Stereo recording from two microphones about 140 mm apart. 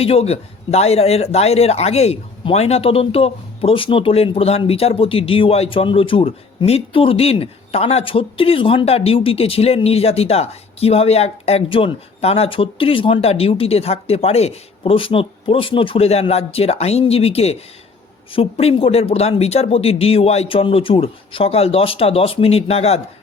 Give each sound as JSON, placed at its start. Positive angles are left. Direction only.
{"t": 0.0, "sound": "a man's voice", "side_deg": 45}